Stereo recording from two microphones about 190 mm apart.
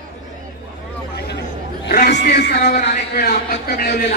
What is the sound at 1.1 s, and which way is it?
Chatter, 60° left (ahead or behind).